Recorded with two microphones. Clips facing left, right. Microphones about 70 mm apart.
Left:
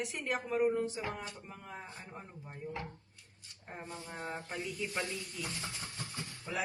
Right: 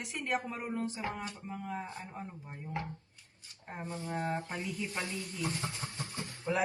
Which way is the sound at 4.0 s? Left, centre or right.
Right.